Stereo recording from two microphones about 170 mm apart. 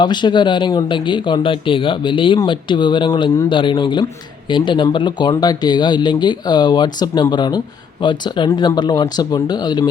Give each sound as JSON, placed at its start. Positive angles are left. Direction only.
{"t": 0.0, "sound": "speech", "side_deg": 25}